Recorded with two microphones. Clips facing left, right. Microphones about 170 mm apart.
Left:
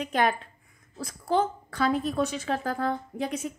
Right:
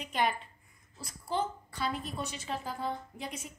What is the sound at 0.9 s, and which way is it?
A woman's voice, 75° left (ahead or behind).